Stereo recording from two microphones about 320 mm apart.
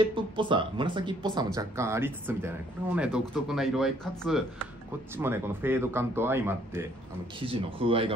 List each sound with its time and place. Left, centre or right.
0.0 s speech: centre